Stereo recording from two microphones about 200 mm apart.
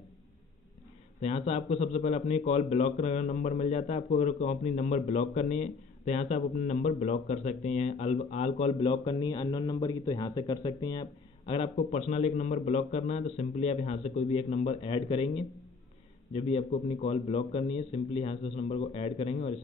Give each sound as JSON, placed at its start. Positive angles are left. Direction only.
{"t": 1.2, "sound": "a man's voice", "side_deg": 30}